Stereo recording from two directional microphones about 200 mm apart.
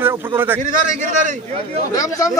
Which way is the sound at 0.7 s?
40° right (ahead or behind).